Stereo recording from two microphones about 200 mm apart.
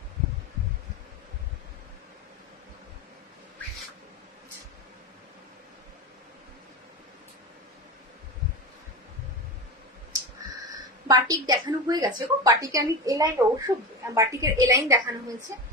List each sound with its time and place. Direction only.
11.1 s a woman's voice: 20° right (ahead or behind)